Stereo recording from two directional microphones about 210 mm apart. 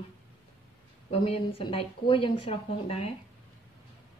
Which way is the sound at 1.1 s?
25° left (ahead or behind).